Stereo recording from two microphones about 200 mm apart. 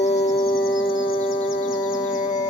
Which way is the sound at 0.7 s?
75° left (ahead or behind).